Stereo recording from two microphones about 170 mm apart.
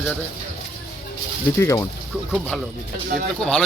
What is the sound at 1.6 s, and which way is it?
Speech, 20° left (ahead or behind).